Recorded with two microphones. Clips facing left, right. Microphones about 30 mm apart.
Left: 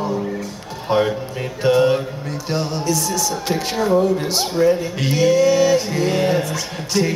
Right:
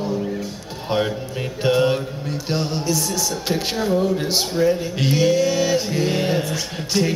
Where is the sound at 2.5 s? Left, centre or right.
Centre.